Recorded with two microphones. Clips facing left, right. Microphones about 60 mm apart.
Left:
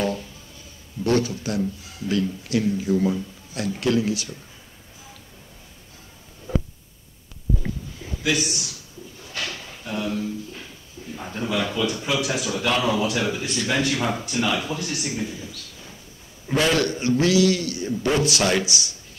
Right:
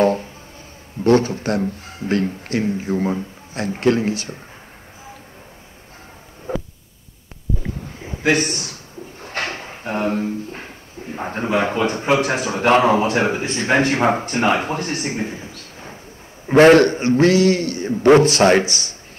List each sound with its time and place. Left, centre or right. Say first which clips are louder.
0.0 s music: right 9 dB; right
1.0 s speech: right 6 dB; right
6.5 s a sound: right 1 dB; right
8.0 s a man's voice: right 7 dB; right